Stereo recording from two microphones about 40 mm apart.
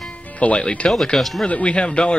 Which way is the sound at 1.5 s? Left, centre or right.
Left.